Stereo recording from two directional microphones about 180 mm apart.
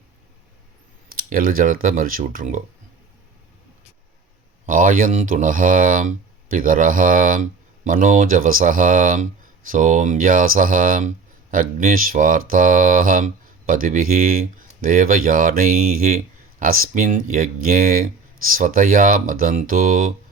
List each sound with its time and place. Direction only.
1.1 s speech: 50° right (ahead or behind)
4.6 s speech: 50° right (ahead or behind)